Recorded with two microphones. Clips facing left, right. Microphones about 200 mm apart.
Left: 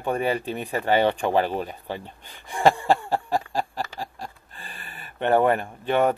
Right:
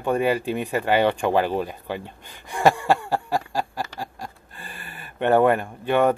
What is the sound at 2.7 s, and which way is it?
Chicken, 15° left (ahead or behind).